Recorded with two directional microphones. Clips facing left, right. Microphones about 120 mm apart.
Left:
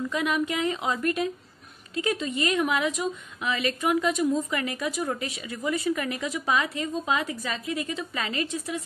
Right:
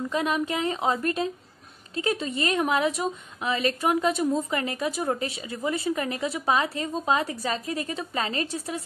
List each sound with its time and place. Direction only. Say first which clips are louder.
0.1 s a woman's voice: right 2 dB; 35° right (ahead or behind)